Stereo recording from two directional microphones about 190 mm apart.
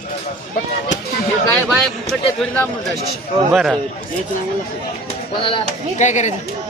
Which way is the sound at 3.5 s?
Centre (ahead or behind).